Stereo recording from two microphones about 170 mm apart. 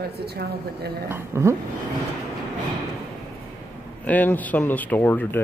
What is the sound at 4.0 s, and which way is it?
Speech, 10° left (ahead or behind).